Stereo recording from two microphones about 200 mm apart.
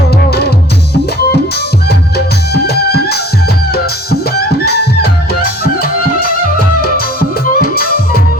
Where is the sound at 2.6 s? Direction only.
55° left (ahead or behind).